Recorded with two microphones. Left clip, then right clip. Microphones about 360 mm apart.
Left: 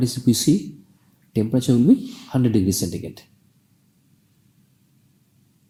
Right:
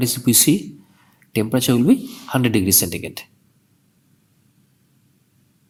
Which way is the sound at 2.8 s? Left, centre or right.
Right.